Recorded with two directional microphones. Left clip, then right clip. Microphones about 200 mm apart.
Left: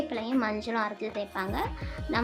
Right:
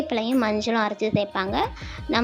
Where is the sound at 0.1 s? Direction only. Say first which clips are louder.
Right 7 dB; 30° right (ahead or behind).